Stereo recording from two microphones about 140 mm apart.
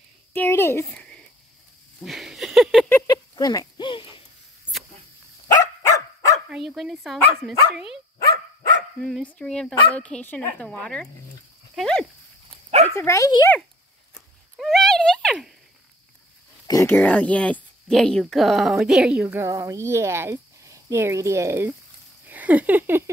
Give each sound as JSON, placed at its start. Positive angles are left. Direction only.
{"t": 0.3, "sound": "speech", "side_deg": 15}
{"t": 0.9, "sound": "cricket", "side_deg": 5}
{"t": 2.0, "sound": "a sound", "side_deg": 0}
{"t": 3.1, "sound": "a sound", "side_deg": 30}
{"t": 5.5, "sound": "dog", "side_deg": 25}
{"t": 6.5, "sound": "speech", "side_deg": 0}
{"t": 9.0, "sound": "speech", "side_deg": 5}
{"t": 12.9, "sound": "speech", "side_deg": 20}
{"t": 14.1, "sound": "a sound", "side_deg": 0}
{"t": 16.6, "sound": "speech", "side_deg": 25}
{"t": 16.9, "sound": "speech", "side_deg": 10}
{"t": 19.2, "sound": "speech", "side_deg": -20}